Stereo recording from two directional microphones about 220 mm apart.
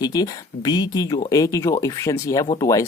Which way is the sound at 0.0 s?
15° left (ahead or behind).